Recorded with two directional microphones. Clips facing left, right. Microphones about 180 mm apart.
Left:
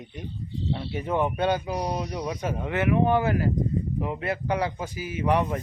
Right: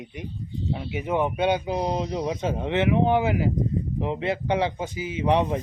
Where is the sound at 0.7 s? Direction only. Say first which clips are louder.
Right 1 dB; 10° right (ahead or behind).